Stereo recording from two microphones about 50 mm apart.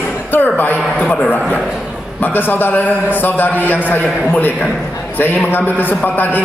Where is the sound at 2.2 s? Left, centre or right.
Left.